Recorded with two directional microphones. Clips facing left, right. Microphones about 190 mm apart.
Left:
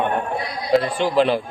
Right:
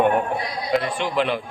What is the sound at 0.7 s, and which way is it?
Speech, 35° left (ahead or behind).